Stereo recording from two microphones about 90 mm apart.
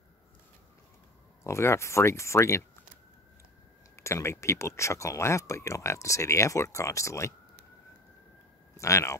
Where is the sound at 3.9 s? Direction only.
30° left (ahead or behind).